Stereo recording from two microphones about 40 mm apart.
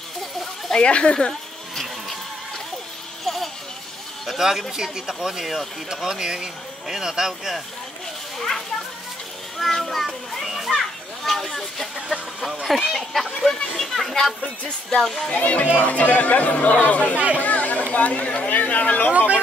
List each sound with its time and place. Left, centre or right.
0.7 s speech: left
4.3 s speech: centre
5.9 s speech: centre
8.4 s speech: centre
10.4 s children playing: centre
11.2 s speech: centre
15.3 s speech: left
17.4 s a sound: left
17.9 s speech: left
19.1 s speech: right